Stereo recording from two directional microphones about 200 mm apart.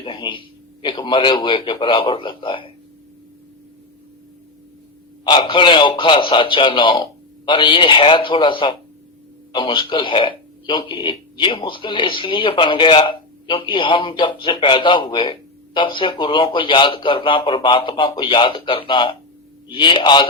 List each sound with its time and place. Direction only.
0.0 s speech: 25° left (ahead or behind)
5.2 s speech: 25° left (ahead or behind)